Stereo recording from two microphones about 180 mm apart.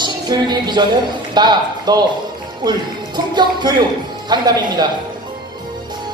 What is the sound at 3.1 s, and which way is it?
Music, 25° right (ahead or behind).